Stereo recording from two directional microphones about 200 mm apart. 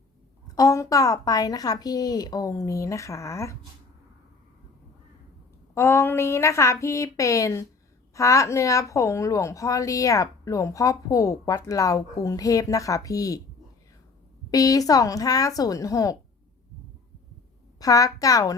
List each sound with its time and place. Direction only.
0.4 s a woman's voice: 15° left (ahead or behind)
5.7 s a woman's voice: 15° left (ahead or behind)
14.5 s a woman's voice: 15° left (ahead or behind)
17.7 s a woman's voice: 15° left (ahead or behind)